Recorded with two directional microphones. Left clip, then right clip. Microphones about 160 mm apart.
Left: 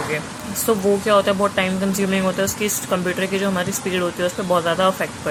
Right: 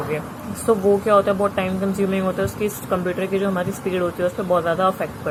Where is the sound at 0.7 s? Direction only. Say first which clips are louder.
Right 1 dB; 25° left (ahead or behind).